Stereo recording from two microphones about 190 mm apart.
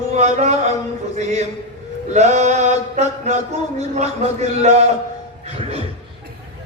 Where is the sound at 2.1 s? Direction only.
35° right (ahead or behind).